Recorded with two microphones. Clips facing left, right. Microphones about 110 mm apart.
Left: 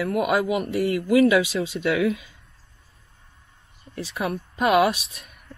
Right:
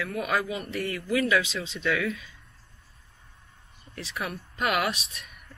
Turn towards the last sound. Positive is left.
turn(degrees=45)  # may be behind; listen again after turning